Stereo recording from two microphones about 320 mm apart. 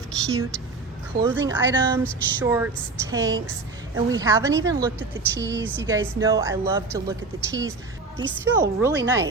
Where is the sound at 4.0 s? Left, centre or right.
Centre.